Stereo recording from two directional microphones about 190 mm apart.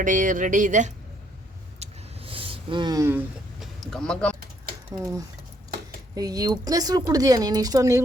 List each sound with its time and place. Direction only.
0.0 s speech: 45° right (ahead or behind)
1.8 s a sound: 30° right (ahead or behind)
3.6 s speech: centre (ahead or behind)
6.1 s a woman's voice: 20° right (ahead or behind)